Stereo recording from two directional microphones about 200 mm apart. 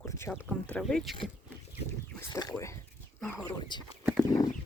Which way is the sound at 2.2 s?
20° left (ahead or behind).